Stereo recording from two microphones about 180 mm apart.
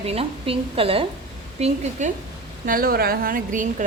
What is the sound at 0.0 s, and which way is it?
Speech, 35° right (ahead or behind).